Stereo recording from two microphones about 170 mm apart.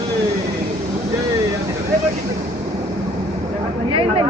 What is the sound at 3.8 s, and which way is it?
Chatter, 35° right (ahead or behind).